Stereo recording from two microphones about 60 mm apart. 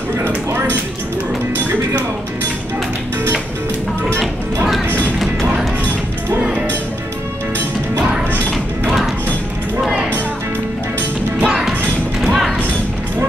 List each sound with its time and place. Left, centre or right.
0.2 s a sound: right
8.8 s music: centre
11.4 s music: centre
12.2 s thump: centre